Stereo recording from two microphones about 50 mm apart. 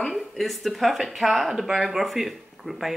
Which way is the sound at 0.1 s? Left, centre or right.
Centre.